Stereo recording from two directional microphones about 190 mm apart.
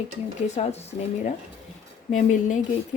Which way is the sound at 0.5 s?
35° left (ahead or behind).